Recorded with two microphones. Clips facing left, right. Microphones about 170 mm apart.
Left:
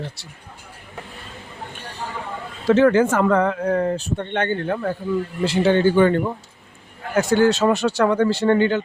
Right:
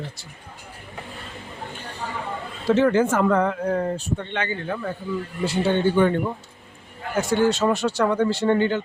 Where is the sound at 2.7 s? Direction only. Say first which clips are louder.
Left 3 dB; 90° left; by 5.0 s 60° left (ahead or behind).